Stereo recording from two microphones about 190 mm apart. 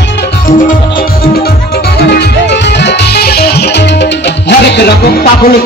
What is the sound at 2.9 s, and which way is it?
Music, 55° left (ahead or behind).